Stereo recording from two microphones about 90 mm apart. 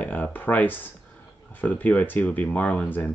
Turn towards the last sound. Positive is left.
turn(degrees=20)  # may be behind; listen again after turning